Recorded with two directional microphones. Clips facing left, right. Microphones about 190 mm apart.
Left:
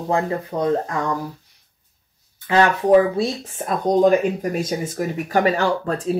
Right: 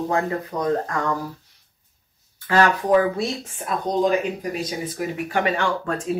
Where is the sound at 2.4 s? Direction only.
20° left (ahead or behind).